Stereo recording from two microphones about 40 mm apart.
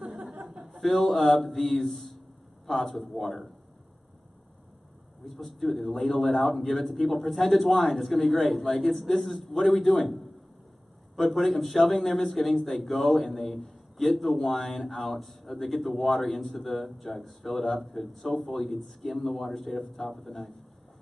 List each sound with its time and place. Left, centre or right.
0.0 s a sound: right
0.5 s mantra: centre
2.6 s a man's voice: centre
5.2 s speech: centre
11.2 s speech: centre